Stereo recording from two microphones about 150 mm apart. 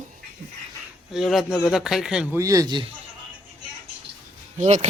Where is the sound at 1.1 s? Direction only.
Centre (ahead or behind).